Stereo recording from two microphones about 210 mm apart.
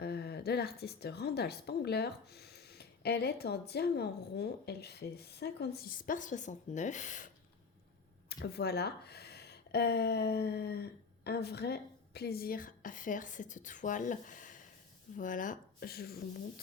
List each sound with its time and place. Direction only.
0.0 s a woman's voice: 50° left (ahead or behind)
8.3 s speech: 50° left (ahead or behind)